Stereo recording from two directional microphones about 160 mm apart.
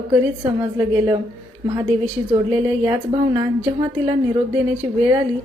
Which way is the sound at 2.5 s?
20° right (ahead or behind).